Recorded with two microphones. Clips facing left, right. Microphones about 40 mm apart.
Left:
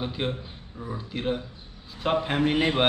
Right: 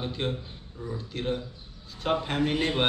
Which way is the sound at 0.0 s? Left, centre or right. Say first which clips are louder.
Left 1 dB; centre.